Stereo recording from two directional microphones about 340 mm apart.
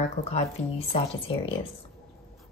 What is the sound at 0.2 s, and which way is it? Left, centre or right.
Speech, centre.